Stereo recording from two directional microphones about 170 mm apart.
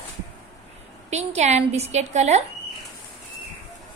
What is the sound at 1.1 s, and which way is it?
A woman's voice, 40° right (ahead or behind).